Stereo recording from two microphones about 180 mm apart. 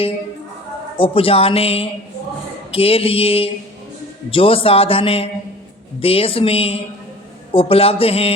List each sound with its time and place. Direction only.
0.9 s a man's voice: 30° left (ahead or behind)